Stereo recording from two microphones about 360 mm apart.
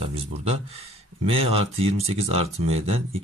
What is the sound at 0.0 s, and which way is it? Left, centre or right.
Speech, centre.